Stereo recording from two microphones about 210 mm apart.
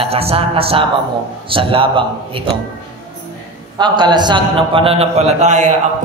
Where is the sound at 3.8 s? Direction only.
20° right (ahead or behind).